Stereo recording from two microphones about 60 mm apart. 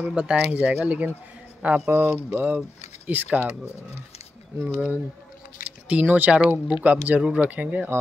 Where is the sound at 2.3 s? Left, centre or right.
Right.